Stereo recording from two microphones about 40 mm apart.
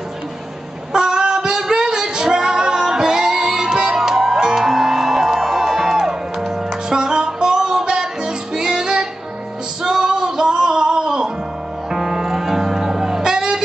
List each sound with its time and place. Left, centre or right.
0.9 s singing: centre
8.5 s music: centre
9.8 s female singing: centre
11.9 s music: centre